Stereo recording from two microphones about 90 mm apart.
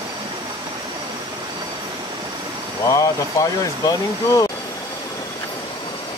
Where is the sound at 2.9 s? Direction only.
40° left (ahead or behind).